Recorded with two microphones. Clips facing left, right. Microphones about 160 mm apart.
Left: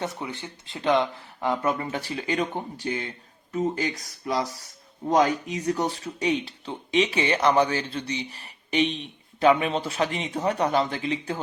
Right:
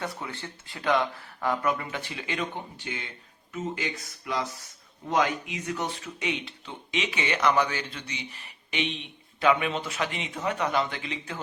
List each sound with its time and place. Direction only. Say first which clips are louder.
0.0 s speech: left 3 dB; 20° left (ahead or behind); by 11.3 s 35° left (ahead or behind)